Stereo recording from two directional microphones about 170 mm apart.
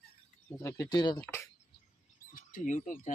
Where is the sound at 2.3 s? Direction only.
50° left (ahead or behind).